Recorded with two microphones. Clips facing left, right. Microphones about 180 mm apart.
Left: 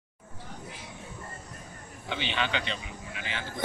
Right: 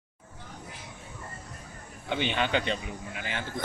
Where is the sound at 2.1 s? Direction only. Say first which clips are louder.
Right 4 dB; 50° right (ahead or behind).